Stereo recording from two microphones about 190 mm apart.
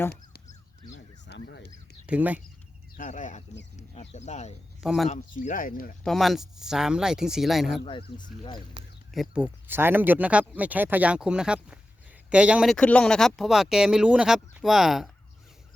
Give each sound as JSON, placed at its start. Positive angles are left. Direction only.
{"t": 0.9, "sound": "a sound", "side_deg": 65}
{"t": 2.0, "sound": "speech", "side_deg": -10}
{"t": 3.0, "sound": "bird", "side_deg": 40}
{"t": 3.8, "sound": "a sound", "side_deg": 35}
{"t": 4.8, "sound": "speech", "side_deg": -5}
{"t": 5.4, "sound": "speech", "side_deg": 45}
{"t": 6.0, "sound": "speech", "side_deg": 0}
{"t": 9.3, "sound": "speech", "side_deg": -10}